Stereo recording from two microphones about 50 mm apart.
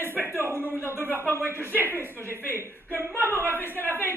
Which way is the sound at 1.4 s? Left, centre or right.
Right.